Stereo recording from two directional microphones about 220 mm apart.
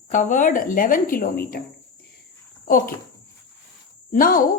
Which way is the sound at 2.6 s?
40° left (ahead or behind).